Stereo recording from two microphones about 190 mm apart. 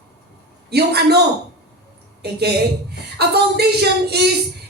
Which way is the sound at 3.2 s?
60° right (ahead or behind).